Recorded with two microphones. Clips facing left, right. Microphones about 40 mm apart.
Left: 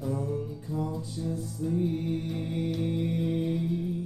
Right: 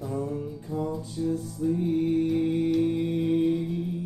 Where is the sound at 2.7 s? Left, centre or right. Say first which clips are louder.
Right 6 dB; centre.